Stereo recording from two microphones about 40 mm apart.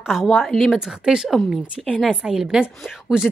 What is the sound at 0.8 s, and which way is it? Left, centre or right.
Speech, centre.